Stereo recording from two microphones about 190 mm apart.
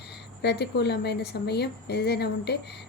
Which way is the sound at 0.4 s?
60° left (ahead or behind).